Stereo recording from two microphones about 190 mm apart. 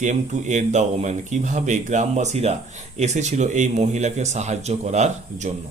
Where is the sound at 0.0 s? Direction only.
40° right (ahead or behind).